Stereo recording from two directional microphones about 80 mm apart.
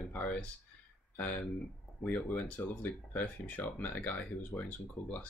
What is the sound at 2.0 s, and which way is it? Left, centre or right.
Speech, centre.